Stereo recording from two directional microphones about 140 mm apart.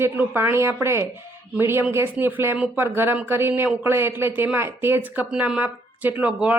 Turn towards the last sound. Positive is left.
turn(degrees=-10)  # may be behind; listen again after turning